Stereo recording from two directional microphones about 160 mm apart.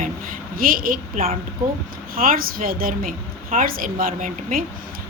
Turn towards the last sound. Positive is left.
turn(degrees=-60)  # may be behind; listen again after turning